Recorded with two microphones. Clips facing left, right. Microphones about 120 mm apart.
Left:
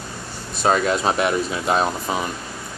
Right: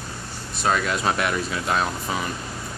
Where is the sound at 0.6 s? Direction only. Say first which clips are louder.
Left 4 dB; 30° left (ahead or behind).